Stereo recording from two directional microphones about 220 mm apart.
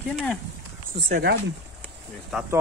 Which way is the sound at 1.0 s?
55° right (ahead or behind).